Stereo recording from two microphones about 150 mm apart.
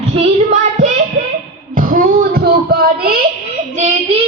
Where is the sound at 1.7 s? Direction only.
65° right (ahead or behind); by 3.2 s 90° right.